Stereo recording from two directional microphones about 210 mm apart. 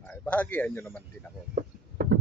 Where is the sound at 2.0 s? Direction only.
50° right (ahead or behind).